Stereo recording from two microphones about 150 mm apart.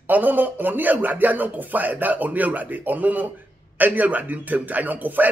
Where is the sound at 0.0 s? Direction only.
10° right (ahead or behind).